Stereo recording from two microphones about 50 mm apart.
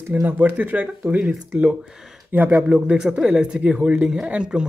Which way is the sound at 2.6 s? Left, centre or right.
Right.